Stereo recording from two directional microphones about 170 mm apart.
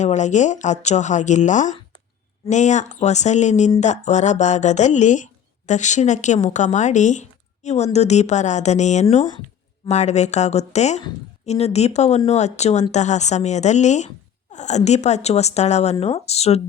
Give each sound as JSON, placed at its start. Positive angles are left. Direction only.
{"t": 0.0, "sound": "a woman's voice", "side_deg": 45}